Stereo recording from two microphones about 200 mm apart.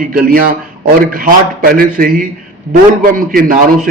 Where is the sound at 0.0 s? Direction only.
45° right (ahead or behind).